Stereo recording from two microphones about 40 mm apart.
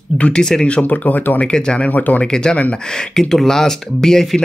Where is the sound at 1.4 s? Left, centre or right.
Left.